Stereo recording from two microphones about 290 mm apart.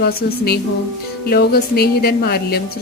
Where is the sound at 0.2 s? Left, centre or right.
Left.